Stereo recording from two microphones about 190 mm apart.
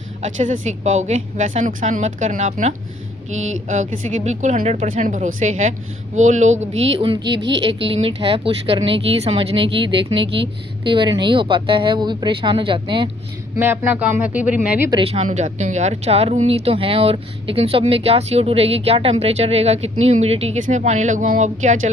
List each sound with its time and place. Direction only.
0.2 s speech: 40° right (ahead or behind)
7.4 s a woman's voice: 70° right (ahead or behind)
7.7 s speech: 30° right (ahead or behind)
10.8 s speech: 25° right (ahead or behind)
13.6 s speech: 10° right (ahead or behind)
14.8 s speech: 30° right (ahead or behind)